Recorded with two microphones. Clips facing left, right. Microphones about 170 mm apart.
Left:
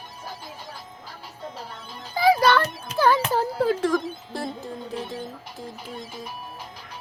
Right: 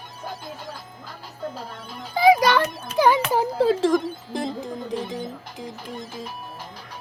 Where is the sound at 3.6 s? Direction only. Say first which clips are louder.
Right 4 dB; 25° right (ahead or behind).